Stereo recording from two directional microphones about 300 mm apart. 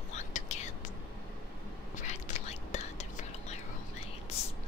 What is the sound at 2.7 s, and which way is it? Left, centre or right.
Whispering, left.